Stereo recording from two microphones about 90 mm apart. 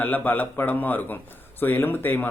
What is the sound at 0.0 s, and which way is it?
A man's voice, 20° left (ahead or behind).